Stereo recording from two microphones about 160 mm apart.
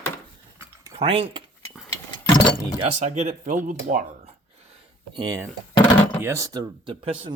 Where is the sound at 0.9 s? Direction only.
40° right (ahead or behind).